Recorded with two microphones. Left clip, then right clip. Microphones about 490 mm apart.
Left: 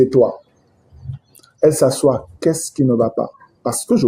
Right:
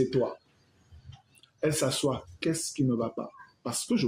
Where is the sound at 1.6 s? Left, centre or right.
Right.